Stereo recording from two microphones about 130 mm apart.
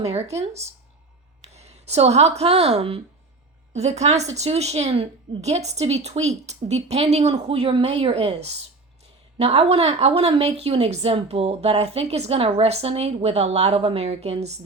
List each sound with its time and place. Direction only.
0.0 s a woman's voice: 55° right (ahead or behind)